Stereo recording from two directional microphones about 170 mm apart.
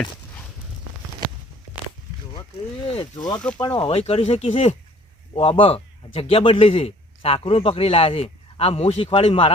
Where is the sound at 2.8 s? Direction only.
35° left (ahead or behind).